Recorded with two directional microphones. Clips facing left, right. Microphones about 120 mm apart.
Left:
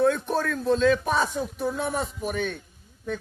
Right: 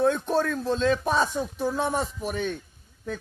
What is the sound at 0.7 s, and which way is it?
Speech, 30° right (ahead or behind).